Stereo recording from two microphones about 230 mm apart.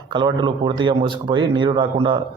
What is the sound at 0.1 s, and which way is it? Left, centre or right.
A man's voice, centre.